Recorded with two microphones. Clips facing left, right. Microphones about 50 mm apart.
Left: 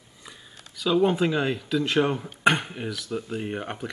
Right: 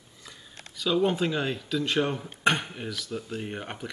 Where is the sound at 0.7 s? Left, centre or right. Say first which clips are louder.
Left 3 dB; centre.